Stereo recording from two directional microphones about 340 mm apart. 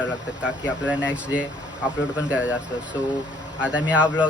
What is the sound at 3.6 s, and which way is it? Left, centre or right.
Speech, centre.